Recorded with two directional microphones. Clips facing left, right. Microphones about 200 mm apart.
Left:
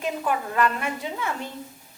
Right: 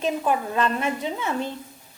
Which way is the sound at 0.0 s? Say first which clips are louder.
Right 3 dB; 25° right (ahead or behind).